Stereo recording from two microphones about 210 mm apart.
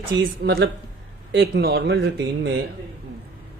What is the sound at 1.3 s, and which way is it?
Speech, 50° right (ahead or behind).